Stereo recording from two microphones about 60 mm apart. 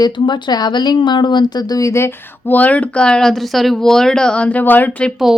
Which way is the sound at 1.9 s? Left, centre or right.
Left.